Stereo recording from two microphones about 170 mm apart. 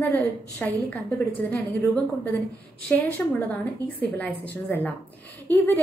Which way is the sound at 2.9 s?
10° left (ahead or behind).